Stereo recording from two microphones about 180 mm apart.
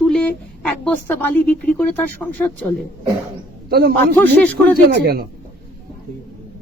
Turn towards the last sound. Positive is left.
turn(degrees=-60)  # may be behind; listen again after turning